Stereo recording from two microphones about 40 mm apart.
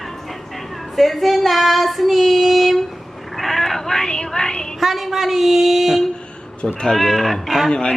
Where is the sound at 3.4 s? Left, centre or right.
Centre.